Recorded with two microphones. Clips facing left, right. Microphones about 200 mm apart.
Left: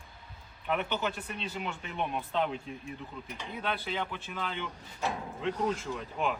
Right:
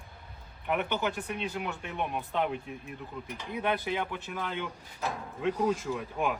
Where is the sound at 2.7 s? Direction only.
60° right (ahead or behind).